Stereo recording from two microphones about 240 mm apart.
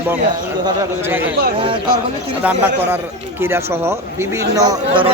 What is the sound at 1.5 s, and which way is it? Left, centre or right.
Speech, right.